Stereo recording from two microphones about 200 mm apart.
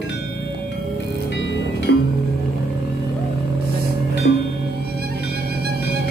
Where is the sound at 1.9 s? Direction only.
60° left (ahead or behind).